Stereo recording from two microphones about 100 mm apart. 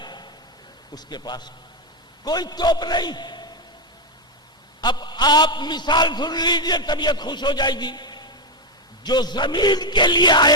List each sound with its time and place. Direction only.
0.0 s vehicle: 45° left (ahead or behind)
0.9 s a man's voice: 45° left (ahead or behind)
4.8 s a man's voice: 45° left (ahead or behind)